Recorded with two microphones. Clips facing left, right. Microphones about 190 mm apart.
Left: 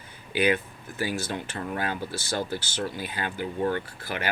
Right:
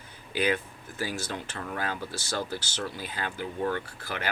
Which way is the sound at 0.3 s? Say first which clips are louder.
Left 3 dB; 65° left (ahead or behind).